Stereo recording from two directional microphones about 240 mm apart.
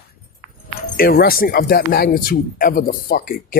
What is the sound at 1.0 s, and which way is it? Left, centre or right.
Speech, left.